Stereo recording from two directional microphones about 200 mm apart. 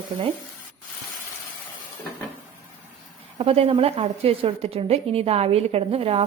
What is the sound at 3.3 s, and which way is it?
A woman's voice, 30° right (ahead or behind).